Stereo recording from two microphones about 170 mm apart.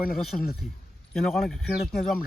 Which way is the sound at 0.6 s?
55° left (ahead or behind).